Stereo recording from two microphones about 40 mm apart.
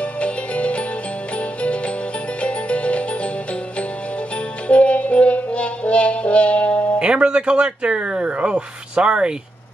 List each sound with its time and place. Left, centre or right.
0.2 s music: left
2.4 s music: left
4.6 s music: left
7.0 s speech: right